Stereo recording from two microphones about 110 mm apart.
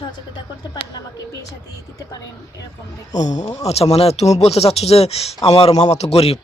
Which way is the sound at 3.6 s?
70° left (ahead or behind).